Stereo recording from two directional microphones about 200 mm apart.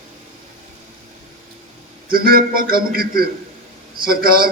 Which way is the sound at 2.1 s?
45° right (ahead or behind).